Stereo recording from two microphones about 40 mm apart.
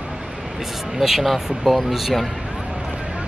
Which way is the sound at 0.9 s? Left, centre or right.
Centre.